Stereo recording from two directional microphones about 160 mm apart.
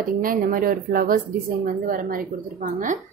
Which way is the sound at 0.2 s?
60° right (ahead or behind).